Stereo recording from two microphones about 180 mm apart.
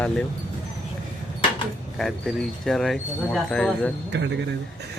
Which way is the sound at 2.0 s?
Centre (ahead or behind).